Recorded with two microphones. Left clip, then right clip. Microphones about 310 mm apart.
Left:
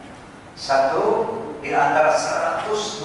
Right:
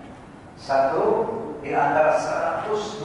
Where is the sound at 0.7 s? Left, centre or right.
Centre.